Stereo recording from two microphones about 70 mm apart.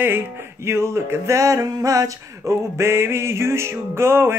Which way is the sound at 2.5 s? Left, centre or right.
Right.